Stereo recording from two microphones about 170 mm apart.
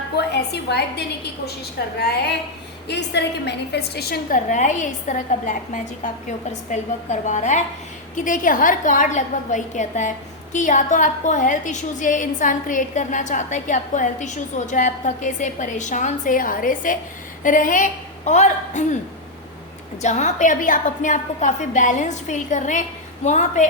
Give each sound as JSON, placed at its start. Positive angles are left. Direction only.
{"t": 0.2, "sound": "a woman's voice", "side_deg": 75}
{"t": 2.8, "sound": "a woman's voice", "side_deg": 90}
{"t": 20.0, "sound": "a woman's voice", "side_deg": 45}